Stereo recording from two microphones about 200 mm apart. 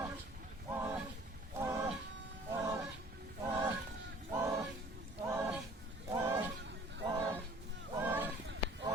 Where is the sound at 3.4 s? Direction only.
10° right (ahead or behind).